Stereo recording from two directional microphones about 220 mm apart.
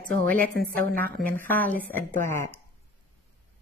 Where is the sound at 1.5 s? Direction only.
10° left (ahead or behind).